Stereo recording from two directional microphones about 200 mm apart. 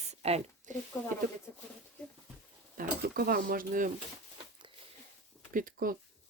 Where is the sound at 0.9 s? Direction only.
15° left (ahead or behind).